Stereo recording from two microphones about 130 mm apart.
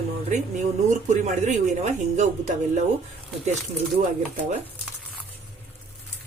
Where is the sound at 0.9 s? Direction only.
70° right (ahead or behind).